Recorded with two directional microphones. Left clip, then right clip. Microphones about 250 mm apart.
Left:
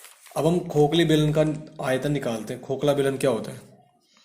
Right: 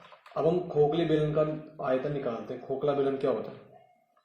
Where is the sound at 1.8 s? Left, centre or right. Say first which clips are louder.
Left 4 dB; left.